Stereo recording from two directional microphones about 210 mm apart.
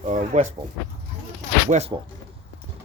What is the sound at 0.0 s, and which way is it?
Speech, 35° right (ahead or behind).